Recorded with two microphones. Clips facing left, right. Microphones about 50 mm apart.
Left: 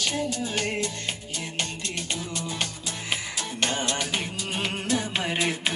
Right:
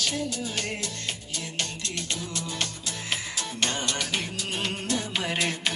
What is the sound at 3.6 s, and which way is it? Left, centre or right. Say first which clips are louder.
Music: left 2 dB; centre.